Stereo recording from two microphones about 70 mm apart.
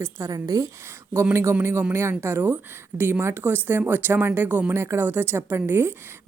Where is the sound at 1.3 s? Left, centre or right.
Right.